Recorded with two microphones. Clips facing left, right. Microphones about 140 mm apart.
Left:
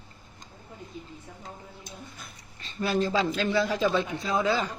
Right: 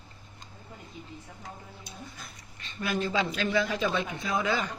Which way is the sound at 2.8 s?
35° left (ahead or behind).